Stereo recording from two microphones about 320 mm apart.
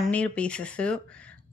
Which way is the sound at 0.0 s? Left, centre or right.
Centre.